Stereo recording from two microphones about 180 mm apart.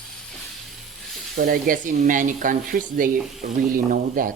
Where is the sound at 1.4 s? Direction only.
55° right (ahead or behind).